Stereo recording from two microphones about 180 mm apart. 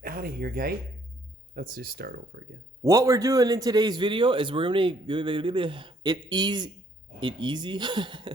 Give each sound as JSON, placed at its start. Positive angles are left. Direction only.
{"t": 0.0, "sound": "speech", "side_deg": -55}
{"t": 2.8, "sound": "a man's voice", "side_deg": -15}